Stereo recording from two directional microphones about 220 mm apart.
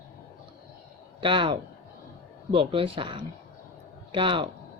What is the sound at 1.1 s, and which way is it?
Speech, 20° right (ahead or behind).